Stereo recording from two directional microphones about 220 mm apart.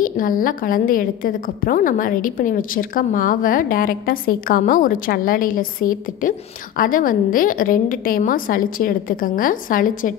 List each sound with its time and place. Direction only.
0.0 s a woman's voice: 40° left (ahead or behind)